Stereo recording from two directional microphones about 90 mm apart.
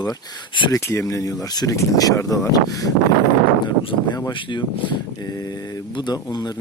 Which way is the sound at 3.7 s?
55° left (ahead or behind).